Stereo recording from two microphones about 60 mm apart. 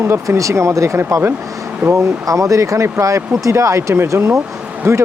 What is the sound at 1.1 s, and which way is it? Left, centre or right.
Speech, right.